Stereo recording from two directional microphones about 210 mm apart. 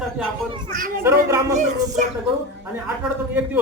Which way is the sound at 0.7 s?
45° right (ahead or behind).